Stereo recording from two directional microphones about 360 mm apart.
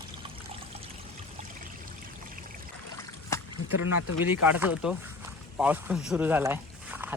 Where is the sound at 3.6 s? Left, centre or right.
Left.